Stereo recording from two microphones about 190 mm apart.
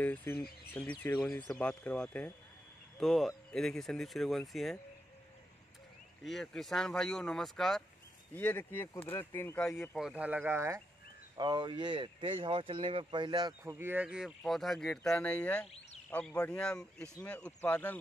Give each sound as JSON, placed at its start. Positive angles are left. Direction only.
{"t": 0.0, "sound": "speech", "side_deg": 10}
{"t": 6.2, "sound": "speech", "side_deg": 0}